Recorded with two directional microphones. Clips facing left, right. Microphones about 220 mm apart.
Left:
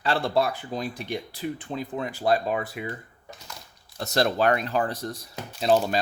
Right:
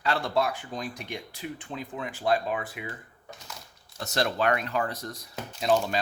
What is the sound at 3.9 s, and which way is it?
Speech, 35° left (ahead or behind).